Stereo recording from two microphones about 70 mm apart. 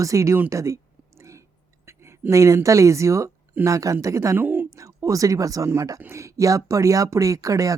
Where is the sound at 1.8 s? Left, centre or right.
Right.